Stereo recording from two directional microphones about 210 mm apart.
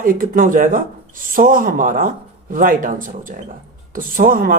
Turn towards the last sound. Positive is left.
turn(degrees=-40)  # may be behind; listen again after turning